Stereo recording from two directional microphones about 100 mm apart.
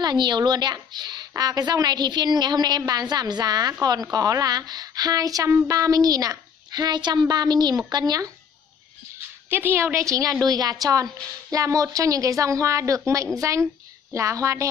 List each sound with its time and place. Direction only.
0.0 s a woman's voice: 45° right (ahead or behind)
9.5 s a woman's voice: 20° right (ahead or behind)